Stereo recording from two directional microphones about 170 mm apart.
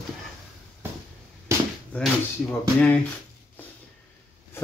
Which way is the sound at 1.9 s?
5° left (ahead or behind).